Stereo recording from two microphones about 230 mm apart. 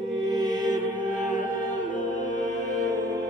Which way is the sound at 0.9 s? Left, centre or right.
Left.